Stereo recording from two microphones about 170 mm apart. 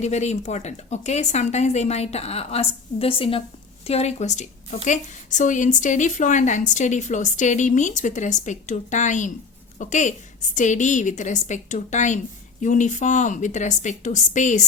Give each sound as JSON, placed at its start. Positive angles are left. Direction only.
{"t": 0.0, "sound": "a woman's voice", "side_deg": 40}